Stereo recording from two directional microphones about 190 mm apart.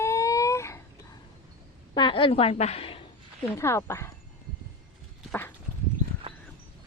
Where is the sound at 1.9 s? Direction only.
25° left (ahead or behind).